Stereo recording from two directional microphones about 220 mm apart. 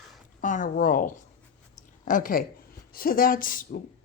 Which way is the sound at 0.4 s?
35° left (ahead or behind).